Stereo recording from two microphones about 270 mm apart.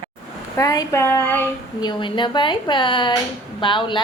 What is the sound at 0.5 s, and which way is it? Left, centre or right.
Speech, centre.